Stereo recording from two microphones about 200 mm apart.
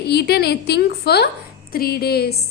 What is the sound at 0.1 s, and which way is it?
A woman's voice, 55° left (ahead or behind).